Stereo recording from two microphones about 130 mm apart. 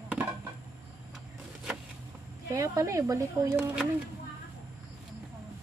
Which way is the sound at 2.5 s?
25° right (ahead or behind).